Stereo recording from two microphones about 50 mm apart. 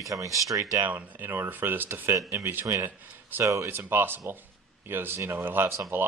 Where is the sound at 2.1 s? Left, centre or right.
Right.